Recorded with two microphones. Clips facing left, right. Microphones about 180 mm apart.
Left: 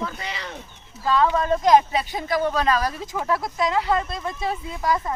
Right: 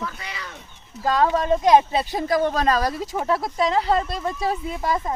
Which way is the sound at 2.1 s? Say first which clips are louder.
Right 2 dB; 40° right (ahead or behind).